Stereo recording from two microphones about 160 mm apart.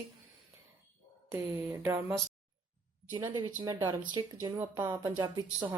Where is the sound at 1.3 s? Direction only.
15° right (ahead or behind).